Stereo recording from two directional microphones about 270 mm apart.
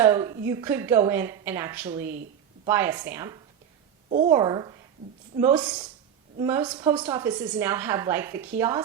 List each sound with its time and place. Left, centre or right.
0.0 s a woman's voice: centre
4.1 s a woman's voice: right; by 8.8 s centre